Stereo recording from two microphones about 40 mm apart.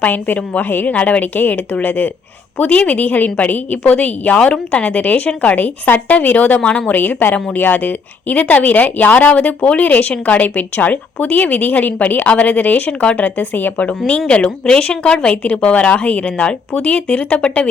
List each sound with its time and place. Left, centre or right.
0.0 s speech: left
0.6 s speech: left
4.5 s speech: left
6.6 s a woman's voice: left
6.8 s speech: left
14.3 s a woman's voice: left